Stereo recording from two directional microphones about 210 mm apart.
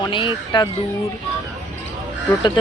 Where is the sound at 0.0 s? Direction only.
25° left (ahead or behind).